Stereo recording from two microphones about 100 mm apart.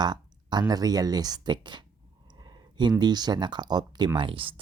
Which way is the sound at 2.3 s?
45° right (ahead or behind).